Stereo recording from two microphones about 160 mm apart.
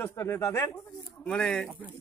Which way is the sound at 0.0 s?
15° left (ahead or behind).